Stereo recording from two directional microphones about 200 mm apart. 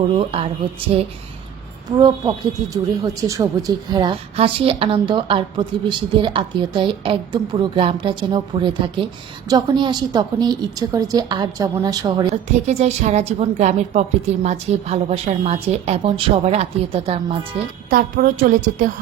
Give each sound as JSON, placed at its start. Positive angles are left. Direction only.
{"t": 0.1, "sound": "a woman's voice", "side_deg": -30}
{"t": 2.0, "sound": "a woman's voice", "side_deg": -20}
{"t": 12.3, "sound": "a woman's voice", "side_deg": -35}
{"t": 17.8, "sound": "a woman's voice", "side_deg": -45}